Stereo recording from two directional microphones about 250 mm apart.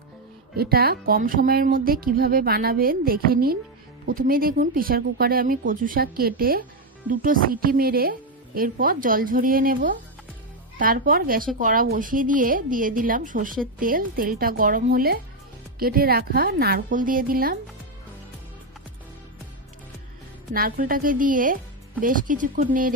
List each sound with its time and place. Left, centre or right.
0.6 s speech: right
20.5 s speech: right